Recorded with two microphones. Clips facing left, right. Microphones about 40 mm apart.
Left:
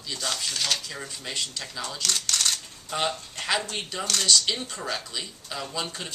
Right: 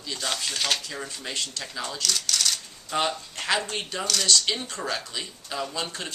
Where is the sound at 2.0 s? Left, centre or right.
Left.